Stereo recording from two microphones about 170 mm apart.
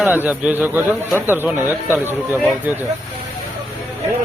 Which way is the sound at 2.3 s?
Centre (ahead or behind).